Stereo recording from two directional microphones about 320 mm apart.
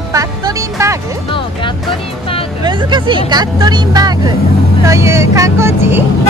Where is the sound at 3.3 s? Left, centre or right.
Centre.